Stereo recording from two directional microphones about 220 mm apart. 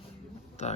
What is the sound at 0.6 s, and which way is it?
Speech, 30° left (ahead or behind).